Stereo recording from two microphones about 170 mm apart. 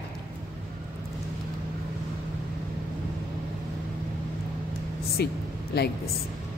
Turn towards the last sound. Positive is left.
turn(degrees=70)  # may be behind; listen again after turning